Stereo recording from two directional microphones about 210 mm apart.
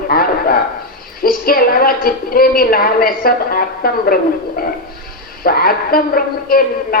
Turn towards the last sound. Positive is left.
turn(degrees=45)  # may be behind; listen again after turning